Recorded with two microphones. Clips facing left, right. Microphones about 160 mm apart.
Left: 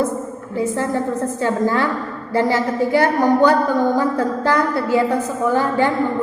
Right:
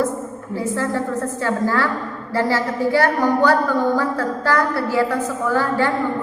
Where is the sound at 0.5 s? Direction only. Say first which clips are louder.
Left 2 dB; 20° left (ahead or behind).